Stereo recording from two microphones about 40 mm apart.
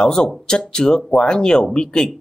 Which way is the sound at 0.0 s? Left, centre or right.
Centre.